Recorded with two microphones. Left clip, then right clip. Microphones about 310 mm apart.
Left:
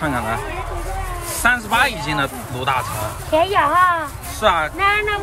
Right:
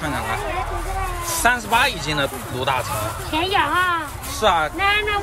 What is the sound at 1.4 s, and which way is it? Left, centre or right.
Speech, centre.